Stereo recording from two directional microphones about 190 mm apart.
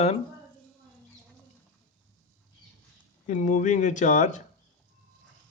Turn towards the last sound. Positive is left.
turn(degrees=40)  # may be behind; listen again after turning